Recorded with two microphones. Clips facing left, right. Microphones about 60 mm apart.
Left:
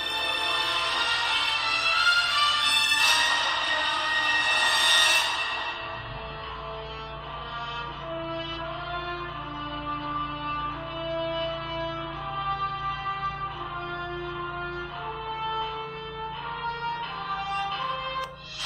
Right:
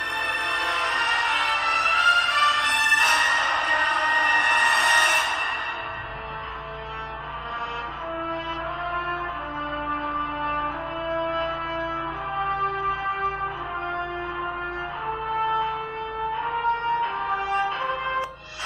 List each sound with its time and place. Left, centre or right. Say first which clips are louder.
0.3 s music: right 1 dB; centre
0.7 s music: right 4 dB; right
9.8 s music: right 2 dB; right
15.0 s music: right 8 dB; right